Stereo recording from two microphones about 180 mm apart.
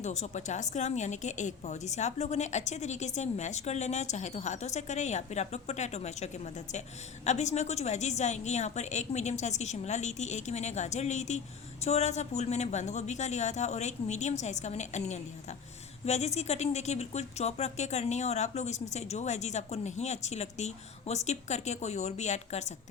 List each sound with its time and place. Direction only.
0.0 s a woman's voice: 40° left (ahead or behind)